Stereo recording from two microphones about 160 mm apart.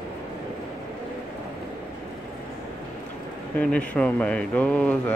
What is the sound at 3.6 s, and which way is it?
Speech, 10° left (ahead or behind).